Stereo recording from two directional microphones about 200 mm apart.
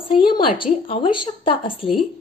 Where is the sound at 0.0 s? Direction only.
25° left (ahead or behind).